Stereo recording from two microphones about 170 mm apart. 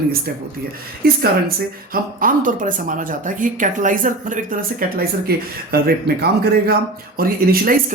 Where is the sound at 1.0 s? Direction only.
65° right (ahead or behind).